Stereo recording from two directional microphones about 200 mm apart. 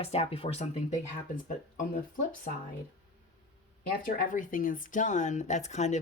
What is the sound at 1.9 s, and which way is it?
Speech, 40° left (ahead or behind).